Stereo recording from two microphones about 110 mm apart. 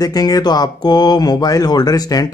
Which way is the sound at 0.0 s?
35° left (ahead or behind).